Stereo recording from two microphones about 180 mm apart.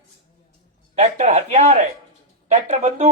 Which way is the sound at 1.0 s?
35° right (ahead or behind).